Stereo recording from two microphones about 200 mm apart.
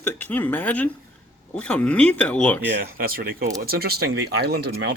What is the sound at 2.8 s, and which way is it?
Speech, 45° right (ahead or behind).